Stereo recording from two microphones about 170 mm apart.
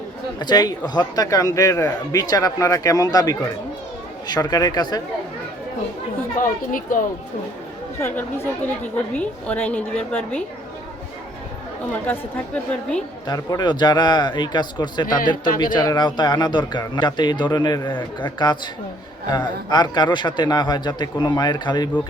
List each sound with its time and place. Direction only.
0.3 s a man's voice: 25° left (ahead or behind)
6.4 s speech: 55° left (ahead or behind)
8.0 s a woman's voice: 10° left (ahead or behind)
13.2 s a man's voice: 25° left (ahead or behind)
15.0 s speech: 55° left (ahead or behind)
15.5 s a man's voice: 25° left (ahead or behind)